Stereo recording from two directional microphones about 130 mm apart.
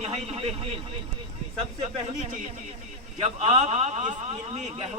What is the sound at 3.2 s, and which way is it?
Speech, 55° right (ahead or behind).